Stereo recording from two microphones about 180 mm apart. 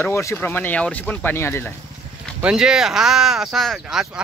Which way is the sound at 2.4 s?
5° right (ahead or behind).